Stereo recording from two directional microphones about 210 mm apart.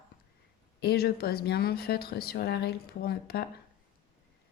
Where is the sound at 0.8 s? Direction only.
50° left (ahead or behind).